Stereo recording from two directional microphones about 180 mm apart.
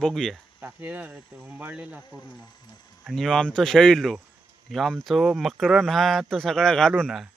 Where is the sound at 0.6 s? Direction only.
10° right (ahead or behind).